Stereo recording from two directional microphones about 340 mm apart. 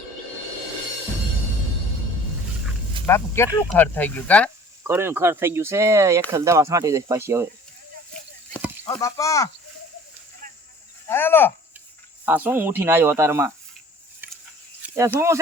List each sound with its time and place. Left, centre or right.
3.1 s speech: centre
4.8 s speech: centre
8.8 s speech: centre
10.4 s a sound: right
11.1 s speech: centre
12.2 s speech: centre
14.8 s a sound: centre